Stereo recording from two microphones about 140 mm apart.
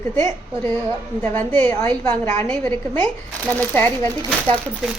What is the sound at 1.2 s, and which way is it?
A woman's voice, 15° left (ahead or behind).